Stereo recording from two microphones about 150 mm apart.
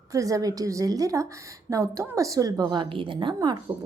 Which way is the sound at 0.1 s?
20° right (ahead or behind).